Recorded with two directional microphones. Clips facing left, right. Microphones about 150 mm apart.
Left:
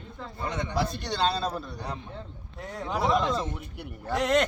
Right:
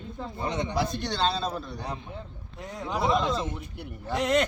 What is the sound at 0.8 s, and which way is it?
A man's voice, 5° left (ahead or behind).